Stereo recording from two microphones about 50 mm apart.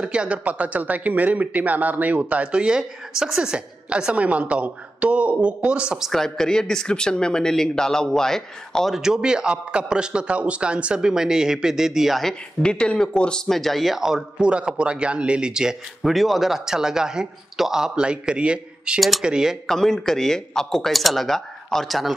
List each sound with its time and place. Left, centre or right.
0.0 s a man's voice: right
2.6 s a man's voice: centre
6.1 s speech: centre
8.9 s a man's voice: centre
12.2 s speech: centre
13.5 s a woman's voice: centre
16.0 s a man's voice: centre; by 18.9 s right
18.9 s speech: centre
19.2 s a man's voice: centre
19.6 s speech: centre